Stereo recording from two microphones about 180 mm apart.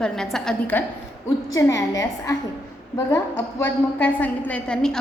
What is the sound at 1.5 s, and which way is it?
Speech, 20° left (ahead or behind).